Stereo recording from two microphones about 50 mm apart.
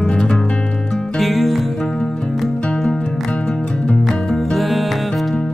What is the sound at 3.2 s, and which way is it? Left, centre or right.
Music, left.